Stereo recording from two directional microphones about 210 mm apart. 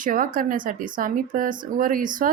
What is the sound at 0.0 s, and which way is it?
A woman's voice, 40° right (ahead or behind).